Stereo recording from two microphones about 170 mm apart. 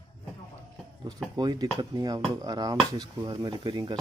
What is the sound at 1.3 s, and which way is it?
Speech, 25° right (ahead or behind).